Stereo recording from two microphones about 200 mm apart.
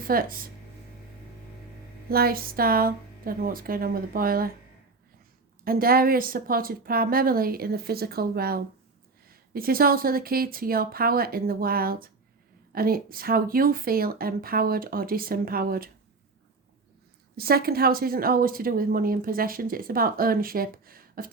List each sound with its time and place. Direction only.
0.1 s a woman's voice: 45° right (ahead or behind)
2.0 s a woman's voice: 50° right (ahead or behind)
5.6 s a woman's voice: 45° right (ahead or behind)
17.3 s a woman's voice: 50° right (ahead or behind)